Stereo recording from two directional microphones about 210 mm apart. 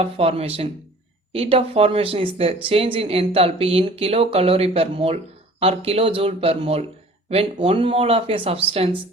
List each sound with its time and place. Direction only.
0.0 s speech: 30° right (ahead or behind)